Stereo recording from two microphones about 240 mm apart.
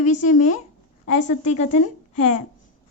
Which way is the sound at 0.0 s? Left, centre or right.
Left.